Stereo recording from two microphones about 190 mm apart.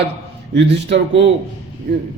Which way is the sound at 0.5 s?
65° right (ahead or behind).